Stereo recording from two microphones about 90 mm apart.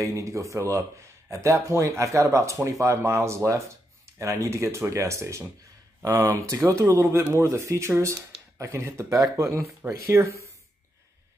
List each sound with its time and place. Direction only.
0.0 s speech: 35° right (ahead or behind)